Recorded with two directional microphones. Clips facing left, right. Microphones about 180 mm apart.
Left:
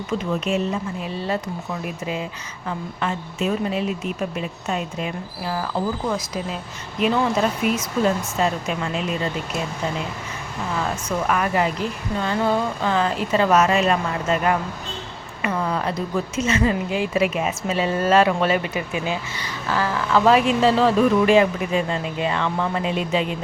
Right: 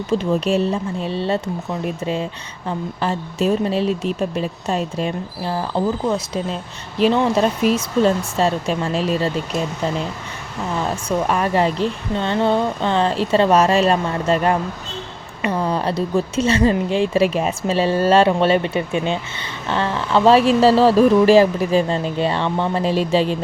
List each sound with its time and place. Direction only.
0.1 s speech: 30° right (ahead or behind)
10.8 s speech: 30° right (ahead or behind)